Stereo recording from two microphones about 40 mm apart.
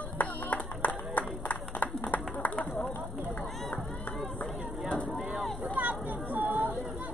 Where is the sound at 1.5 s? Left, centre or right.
Left.